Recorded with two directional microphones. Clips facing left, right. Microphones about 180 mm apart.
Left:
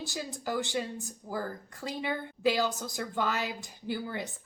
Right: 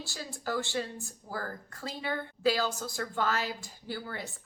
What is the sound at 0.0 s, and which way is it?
Speech, 20° left (ahead or behind).